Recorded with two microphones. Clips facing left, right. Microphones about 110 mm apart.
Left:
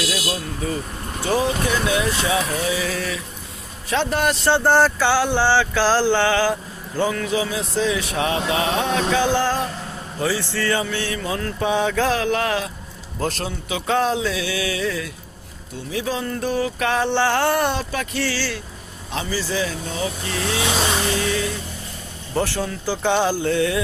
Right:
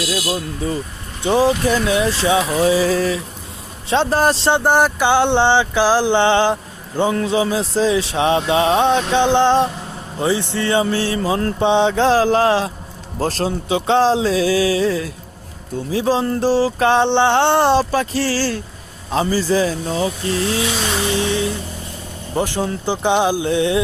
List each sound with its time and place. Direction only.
1.2 s speech: 30° right (ahead or behind)
2.5 s a sound: 35° right (ahead or behind)
4.4 s speech: 15° right (ahead or behind)
10.8 s a sound: 35° right (ahead or behind)
21.1 s music: 25° right (ahead or behind)
22.4 s speech: 20° right (ahead or behind)